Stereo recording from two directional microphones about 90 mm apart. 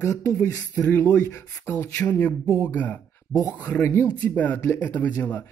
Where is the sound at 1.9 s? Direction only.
15° left (ahead or behind).